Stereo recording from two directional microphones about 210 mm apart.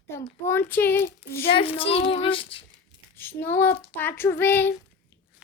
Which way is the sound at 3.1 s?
10° left (ahead or behind).